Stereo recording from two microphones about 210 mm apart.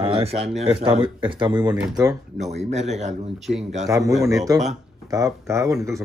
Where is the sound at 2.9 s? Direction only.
30° right (ahead or behind).